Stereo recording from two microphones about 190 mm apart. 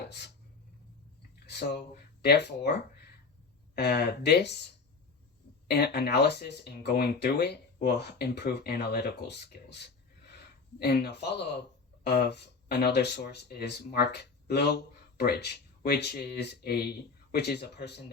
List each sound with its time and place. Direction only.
1.5 s speech: 60° left (ahead or behind)
3.8 s speech: 60° left (ahead or behind)
5.6 s speech: 55° left (ahead or behind)